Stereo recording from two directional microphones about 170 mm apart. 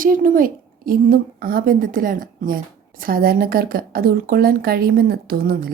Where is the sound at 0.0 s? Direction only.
55° right (ahead or behind).